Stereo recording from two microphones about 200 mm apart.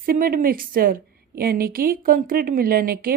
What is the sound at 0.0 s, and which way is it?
A woman's voice, 45° right (ahead or behind).